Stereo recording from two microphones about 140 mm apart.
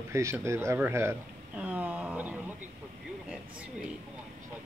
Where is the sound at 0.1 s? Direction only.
20° right (ahead or behind).